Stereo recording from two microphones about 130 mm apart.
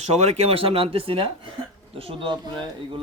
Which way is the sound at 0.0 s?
55° right (ahead or behind).